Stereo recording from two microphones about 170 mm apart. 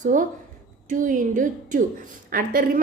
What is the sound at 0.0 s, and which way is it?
A woman's voice, 50° right (ahead or behind).